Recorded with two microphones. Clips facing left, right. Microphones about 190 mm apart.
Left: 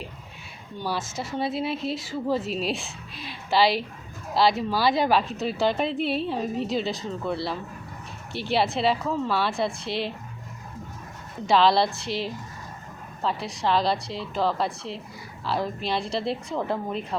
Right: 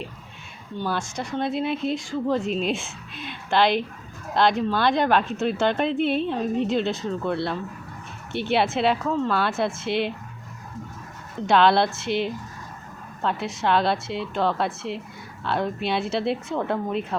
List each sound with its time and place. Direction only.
0.8 s speech: centre (ahead or behind)
11.4 s speech: centre (ahead or behind)